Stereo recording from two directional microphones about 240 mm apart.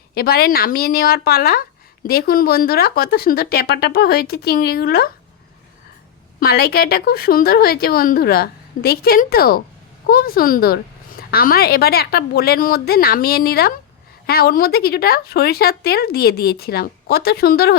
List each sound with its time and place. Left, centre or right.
0.1 s a woman's voice: left
6.4 s a woman's voice: left